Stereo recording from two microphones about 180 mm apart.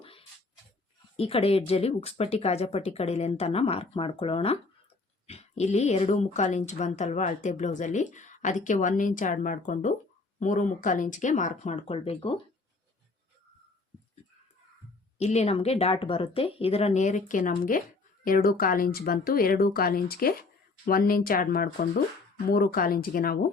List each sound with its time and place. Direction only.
0.0 s a sound: 30° left (ahead or behind)
1.1 s speech: 35° left (ahead or behind)
15.2 s speech: 35° left (ahead or behind); by 23.5 s 55° left (ahead or behind)